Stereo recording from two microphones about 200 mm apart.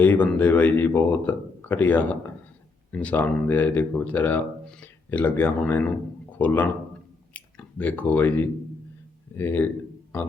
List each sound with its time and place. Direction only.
0.0 s speech: 10° left (ahead or behind)